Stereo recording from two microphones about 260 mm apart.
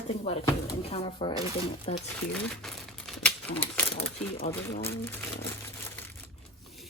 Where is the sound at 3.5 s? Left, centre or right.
Centre.